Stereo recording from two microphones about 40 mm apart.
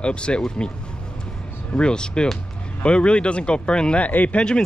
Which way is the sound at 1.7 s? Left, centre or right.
Left.